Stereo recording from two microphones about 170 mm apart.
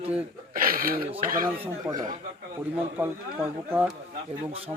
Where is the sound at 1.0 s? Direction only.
35° right (ahead or behind).